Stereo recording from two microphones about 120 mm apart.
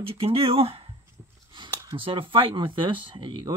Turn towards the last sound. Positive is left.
turn(degrees=-40)  # may be behind; listen again after turning